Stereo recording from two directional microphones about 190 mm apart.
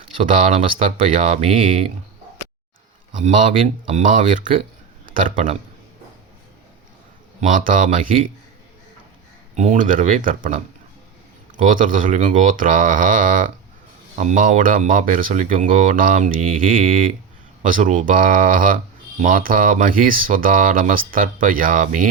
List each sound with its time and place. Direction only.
0.2 s speech: 30° right (ahead or behind)
3.1 s speech: 40° right (ahead or behind)
7.4 s speech: 45° right (ahead or behind)
9.6 s speech: 40° right (ahead or behind)